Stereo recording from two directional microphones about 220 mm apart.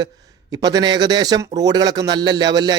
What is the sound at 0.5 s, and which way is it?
A man's voice, 15° right (ahead or behind).